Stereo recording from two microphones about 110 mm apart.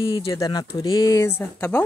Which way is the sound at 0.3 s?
35° left (ahead or behind).